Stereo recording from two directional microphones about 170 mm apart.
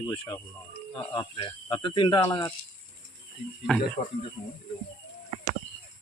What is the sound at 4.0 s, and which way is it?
Speech, 50° left (ahead or behind).